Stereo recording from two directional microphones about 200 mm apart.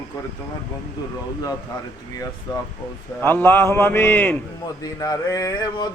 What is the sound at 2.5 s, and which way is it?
Male singing, 20° left (ahead or behind).